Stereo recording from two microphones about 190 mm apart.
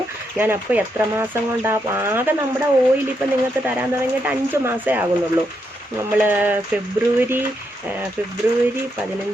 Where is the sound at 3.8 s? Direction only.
10° right (ahead or behind).